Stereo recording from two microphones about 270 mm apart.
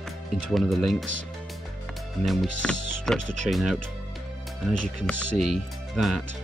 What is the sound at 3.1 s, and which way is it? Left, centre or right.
Speech, right.